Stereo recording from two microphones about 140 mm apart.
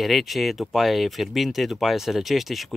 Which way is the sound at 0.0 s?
Centre (ahead or behind).